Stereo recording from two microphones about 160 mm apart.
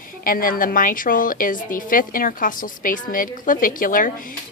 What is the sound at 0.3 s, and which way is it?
A woman's voice, 65° left (ahead or behind).